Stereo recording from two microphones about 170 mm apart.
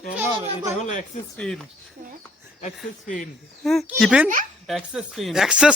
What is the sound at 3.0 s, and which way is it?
Speech, 50° left (ahead or behind).